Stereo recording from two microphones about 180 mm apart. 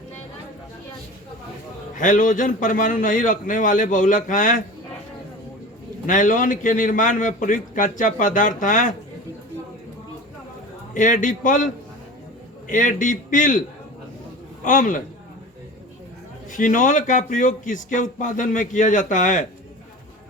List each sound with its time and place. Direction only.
2.0 s speech: 45° left (ahead or behind)
6.1 s speech: 45° left (ahead or behind)
10.9 s a man's voice: 45° left (ahead or behind)
16.5 s speech: 45° left (ahead or behind)